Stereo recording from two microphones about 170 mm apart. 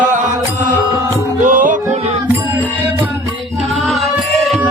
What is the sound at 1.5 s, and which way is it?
Music, 50° right (ahead or behind).